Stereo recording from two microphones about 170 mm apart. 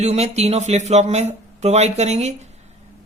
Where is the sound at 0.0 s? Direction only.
40° right (ahead or behind).